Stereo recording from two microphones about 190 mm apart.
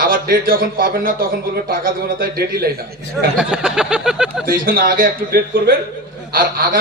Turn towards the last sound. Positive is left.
turn(degrees=-50)  # may be behind; listen again after turning